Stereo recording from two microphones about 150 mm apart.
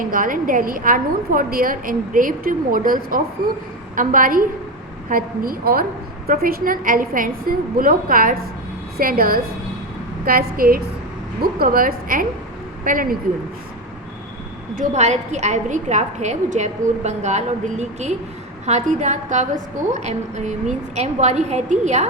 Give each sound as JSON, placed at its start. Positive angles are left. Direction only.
{"t": 0.0, "sound": "a woman's voice", "side_deg": -65}
{"t": 14.8, "sound": "a woman's voice", "side_deg": -50}